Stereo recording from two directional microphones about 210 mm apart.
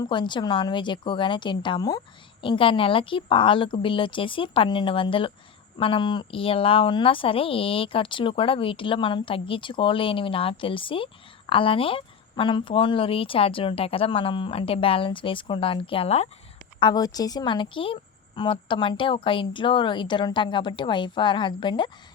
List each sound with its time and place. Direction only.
0.0 s speech: 20° left (ahead or behind)
16.8 s speech: 20° left (ahead or behind)